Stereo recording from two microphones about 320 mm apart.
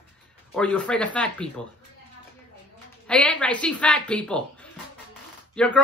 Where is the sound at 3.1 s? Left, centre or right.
Centre.